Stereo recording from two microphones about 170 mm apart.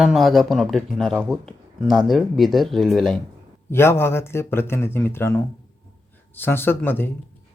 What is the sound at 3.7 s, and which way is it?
Speech, 15° left (ahead or behind).